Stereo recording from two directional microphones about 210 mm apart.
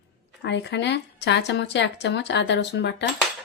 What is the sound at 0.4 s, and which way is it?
A woman's voice, 55° left (ahead or behind).